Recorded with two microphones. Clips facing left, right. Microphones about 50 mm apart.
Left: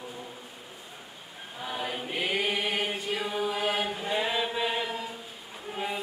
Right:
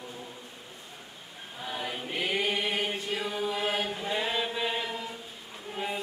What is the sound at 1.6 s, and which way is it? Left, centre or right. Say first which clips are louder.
Choir: left 2 dB; centre.